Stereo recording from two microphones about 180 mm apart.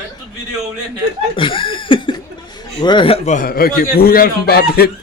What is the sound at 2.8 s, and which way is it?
A man's voice, 25° left (ahead or behind).